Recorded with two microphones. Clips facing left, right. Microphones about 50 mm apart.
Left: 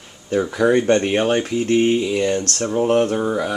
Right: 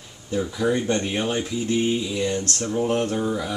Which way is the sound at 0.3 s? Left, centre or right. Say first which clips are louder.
Left 6 dB; left.